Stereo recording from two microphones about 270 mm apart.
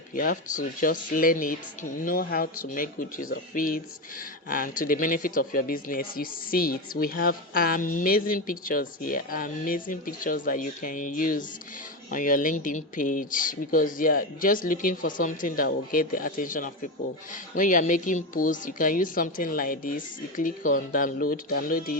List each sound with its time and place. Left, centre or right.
0.1 s speech: left